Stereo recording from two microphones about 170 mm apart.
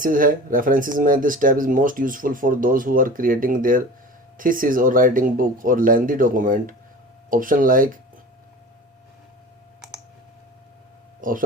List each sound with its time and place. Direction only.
0.0 s speech: 55° right (ahead or behind)
11.2 s speech: 55° right (ahead or behind)